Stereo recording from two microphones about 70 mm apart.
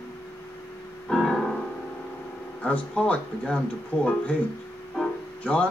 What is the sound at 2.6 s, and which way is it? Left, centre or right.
Speech, centre.